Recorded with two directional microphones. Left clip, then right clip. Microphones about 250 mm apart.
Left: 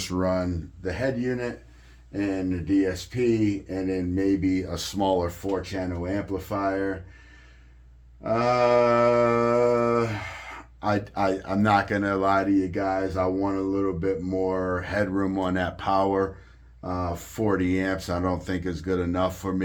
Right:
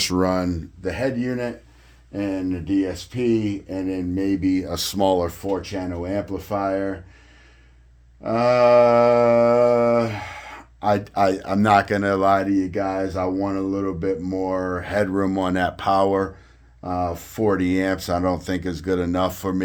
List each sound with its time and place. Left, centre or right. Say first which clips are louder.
0.0 s speech: right 5 dB; right
3.8 s speech: right 1 dB; right
8.2 s speech: right 5 dB; right